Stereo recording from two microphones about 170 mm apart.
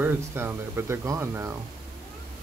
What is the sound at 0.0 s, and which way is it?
Speech, 10° right (ahead or behind).